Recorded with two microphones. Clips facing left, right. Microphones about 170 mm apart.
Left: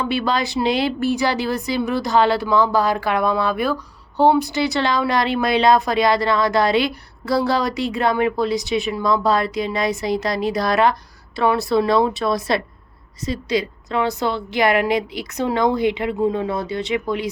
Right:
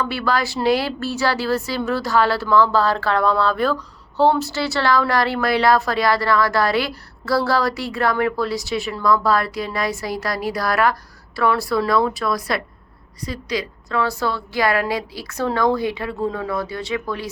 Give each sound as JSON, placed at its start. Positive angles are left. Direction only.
{"t": 0.0, "sound": "speech", "side_deg": 20}